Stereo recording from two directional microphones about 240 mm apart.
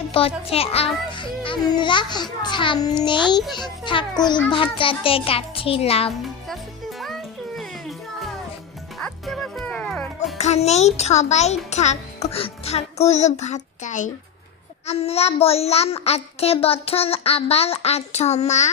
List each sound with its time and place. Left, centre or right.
0.1 s a child's voice: left
7.0 s music: centre
10.3 s a child's voice: left